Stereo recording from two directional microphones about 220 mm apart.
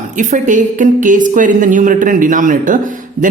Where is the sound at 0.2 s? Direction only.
35° right (ahead or behind).